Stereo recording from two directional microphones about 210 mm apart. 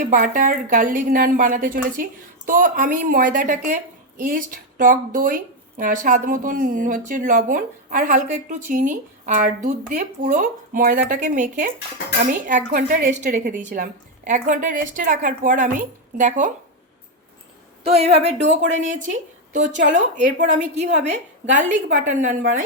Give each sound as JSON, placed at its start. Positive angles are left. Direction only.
{"t": 0.0, "sound": "a woman's voice", "side_deg": -40}
{"t": 4.8, "sound": "a woman's voice", "side_deg": -40}
{"t": 17.8, "sound": "a woman's voice", "side_deg": -30}